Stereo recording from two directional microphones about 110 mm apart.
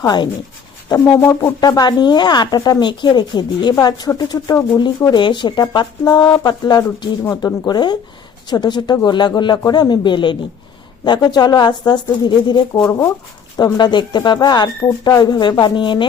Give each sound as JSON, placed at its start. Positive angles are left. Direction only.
{"t": 0.0, "sound": "speech", "side_deg": 40}
{"t": 0.9, "sound": "speech", "side_deg": 25}
{"t": 7.3, "sound": "speech", "side_deg": 25}
{"t": 7.7, "sound": "speech", "side_deg": 40}
{"t": 12.7, "sound": "speech", "side_deg": 20}
{"t": 13.7, "sound": "speech", "side_deg": 45}